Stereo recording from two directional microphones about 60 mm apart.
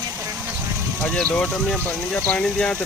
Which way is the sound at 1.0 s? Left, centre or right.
Centre.